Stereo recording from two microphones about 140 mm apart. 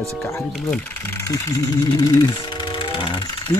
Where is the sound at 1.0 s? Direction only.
20° left (ahead or behind); by 3.1 s 35° left (ahead or behind).